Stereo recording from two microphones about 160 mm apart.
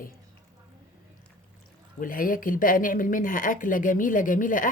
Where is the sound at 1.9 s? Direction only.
60° left (ahead or behind).